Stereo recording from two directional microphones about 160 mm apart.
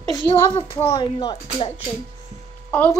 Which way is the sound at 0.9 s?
30° left (ahead or behind).